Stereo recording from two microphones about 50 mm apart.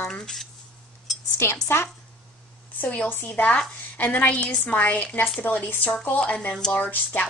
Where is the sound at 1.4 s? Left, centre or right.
Left.